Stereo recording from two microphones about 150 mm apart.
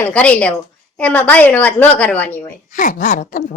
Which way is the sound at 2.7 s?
60° left (ahead or behind).